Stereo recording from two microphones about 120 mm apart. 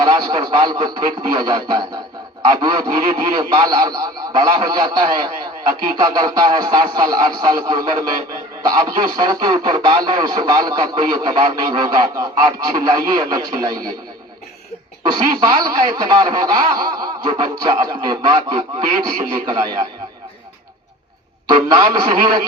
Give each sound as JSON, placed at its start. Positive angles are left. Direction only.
{"t": 0.0, "sound": "a man's voice", "side_deg": -35}
{"t": 15.0, "sound": "speech", "side_deg": -35}
{"t": 21.5, "sound": "speech", "side_deg": -35}